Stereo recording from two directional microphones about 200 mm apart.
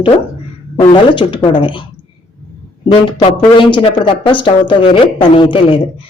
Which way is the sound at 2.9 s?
25° left (ahead or behind).